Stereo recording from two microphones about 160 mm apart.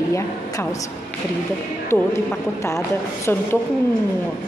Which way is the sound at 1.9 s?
15° left (ahead or behind).